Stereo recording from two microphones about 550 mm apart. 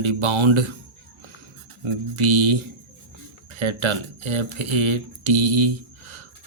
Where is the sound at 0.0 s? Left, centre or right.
Right.